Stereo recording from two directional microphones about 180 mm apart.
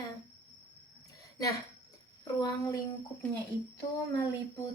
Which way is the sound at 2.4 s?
20° left (ahead or behind).